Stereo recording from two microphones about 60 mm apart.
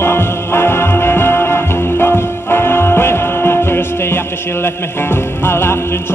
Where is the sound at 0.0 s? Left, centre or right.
Left.